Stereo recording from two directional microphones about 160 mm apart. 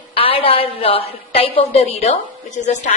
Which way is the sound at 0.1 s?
35° left (ahead or behind).